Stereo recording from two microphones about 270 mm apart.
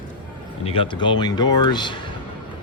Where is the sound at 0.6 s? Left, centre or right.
Centre.